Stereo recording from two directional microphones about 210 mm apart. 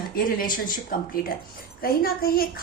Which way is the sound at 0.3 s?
40° left (ahead or behind).